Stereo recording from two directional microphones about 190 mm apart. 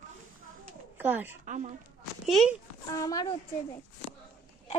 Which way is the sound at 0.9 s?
10° right (ahead or behind).